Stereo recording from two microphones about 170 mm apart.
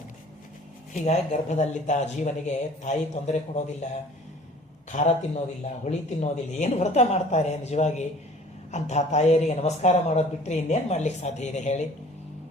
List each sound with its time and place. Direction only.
1.0 s speech: 40° left (ahead or behind)
4.9 s speech: 40° left (ahead or behind)